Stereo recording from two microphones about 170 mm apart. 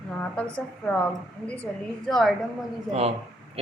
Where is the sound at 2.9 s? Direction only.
35° right (ahead or behind).